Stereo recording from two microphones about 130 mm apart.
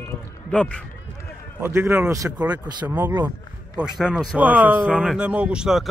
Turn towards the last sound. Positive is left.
turn(degrees=-5)  # may be behind; listen again after turning